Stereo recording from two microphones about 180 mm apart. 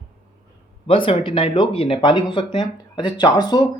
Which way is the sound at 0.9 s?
30° left (ahead or behind).